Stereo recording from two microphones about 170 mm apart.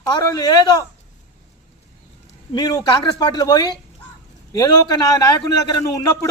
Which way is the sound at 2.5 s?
25° left (ahead or behind).